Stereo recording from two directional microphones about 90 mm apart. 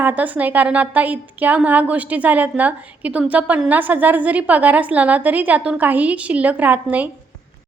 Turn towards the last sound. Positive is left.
turn(degrees=-15)  # may be behind; listen again after turning